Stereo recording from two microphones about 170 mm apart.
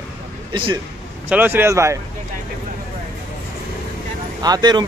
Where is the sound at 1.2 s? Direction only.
10° right (ahead or behind).